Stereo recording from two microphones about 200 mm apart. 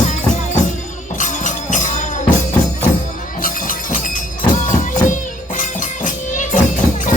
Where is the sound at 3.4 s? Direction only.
45° left (ahead or behind).